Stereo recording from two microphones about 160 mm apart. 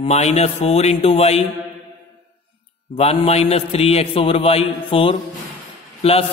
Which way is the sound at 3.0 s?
40° left (ahead or behind).